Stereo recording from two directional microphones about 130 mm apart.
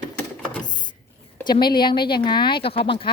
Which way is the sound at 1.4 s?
35° left (ahead or behind).